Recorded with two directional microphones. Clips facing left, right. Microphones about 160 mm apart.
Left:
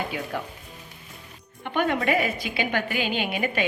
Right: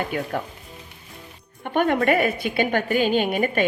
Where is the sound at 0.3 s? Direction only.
50° right (ahead or behind).